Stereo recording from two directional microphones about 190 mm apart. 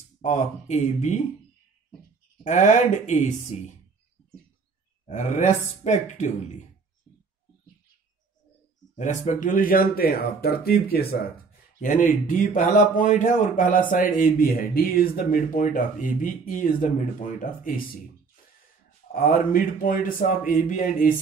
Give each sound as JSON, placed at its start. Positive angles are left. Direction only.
{"t": 0.2, "sound": "speech", "side_deg": 40}
{"t": 2.4, "sound": "speech", "side_deg": 40}
{"t": 5.0, "sound": "speech", "side_deg": 40}
{"t": 8.9, "sound": "speech", "side_deg": 40}
{"t": 11.8, "sound": "speech", "side_deg": 45}
{"t": 19.1, "sound": "speech", "side_deg": 45}